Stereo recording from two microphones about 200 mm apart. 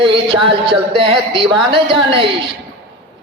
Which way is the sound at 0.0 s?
25° right (ahead or behind).